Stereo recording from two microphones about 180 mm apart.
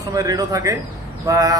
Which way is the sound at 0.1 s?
20° right (ahead or behind).